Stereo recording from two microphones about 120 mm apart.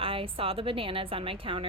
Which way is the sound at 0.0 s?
50° right (ahead or behind).